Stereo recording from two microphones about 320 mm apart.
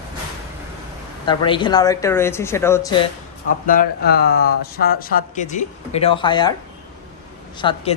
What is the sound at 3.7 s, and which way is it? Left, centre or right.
Speech, left.